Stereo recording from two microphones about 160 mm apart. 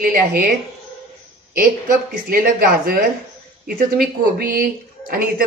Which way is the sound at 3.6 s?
70° right (ahead or behind).